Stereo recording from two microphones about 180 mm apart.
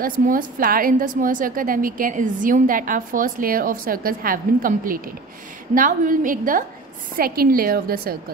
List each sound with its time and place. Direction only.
0.0 s a woman's voice: 50° right (ahead or behind)